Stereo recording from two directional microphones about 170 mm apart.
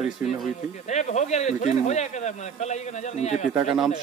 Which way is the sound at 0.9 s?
45° left (ahead or behind).